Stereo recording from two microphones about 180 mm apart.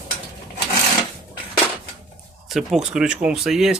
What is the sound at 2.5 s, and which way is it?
Speech, centre (ahead or behind).